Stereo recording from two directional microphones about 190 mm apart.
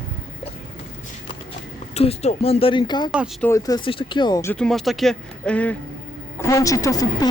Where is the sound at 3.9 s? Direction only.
25° left (ahead or behind).